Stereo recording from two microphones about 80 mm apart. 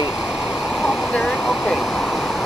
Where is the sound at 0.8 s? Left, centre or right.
Centre.